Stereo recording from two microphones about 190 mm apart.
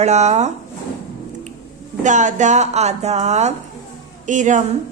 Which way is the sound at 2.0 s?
40° right (ahead or behind).